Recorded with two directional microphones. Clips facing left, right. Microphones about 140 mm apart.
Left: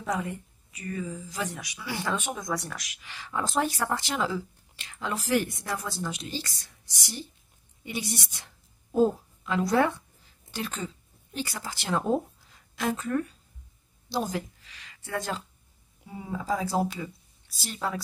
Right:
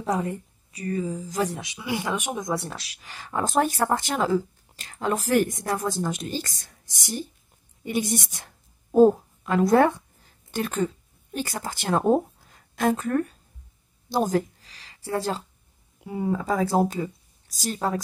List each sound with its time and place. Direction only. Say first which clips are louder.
0.0 s speech: right 5 dB; 35° right (ahead or behind)
1.6 s speech: right 5 dB; 20° right (ahead or behind)
2.5 s speech: right 4 dB; 30° right (ahead or behind); by 7.2 s 50° right (ahead or behind)
7.8 s a sound: right 8 dB; 50° right (ahead or behind)
11.3 s a woman's voice: right 4 dB; 50° right (ahead or behind)
14.0 s a sound: right 7 dB; 50° right (ahead or behind)
15.0 s speech: right 5 dB; 35° right (ahead or behind)
16.0 s speech: right 9 dB; 60° right (ahead or behind); by 18.0 s 40° right (ahead or behind)